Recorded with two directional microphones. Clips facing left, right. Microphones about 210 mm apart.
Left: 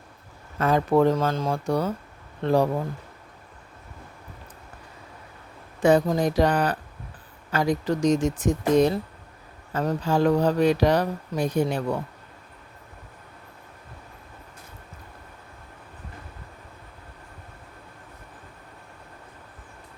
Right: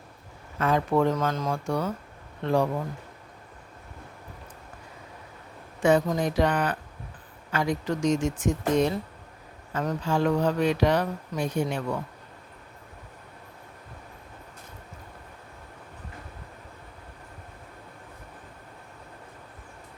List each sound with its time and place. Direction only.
0.6 s speech: 35° left (ahead or behind)
5.8 s speech: 35° left (ahead or behind)